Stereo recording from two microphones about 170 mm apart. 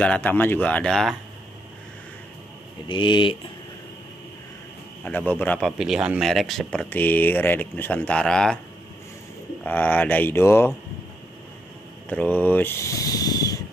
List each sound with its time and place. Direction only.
0.0 s speech: 10° left (ahead or behind)
2.9 s speech: 30° left (ahead or behind)
5.0 s speech: 10° left (ahead or behind)
5.7 s speech: 5° right (ahead or behind)
9.6 s speech: 10° left (ahead or behind)
12.1 s speech: 10° left (ahead or behind)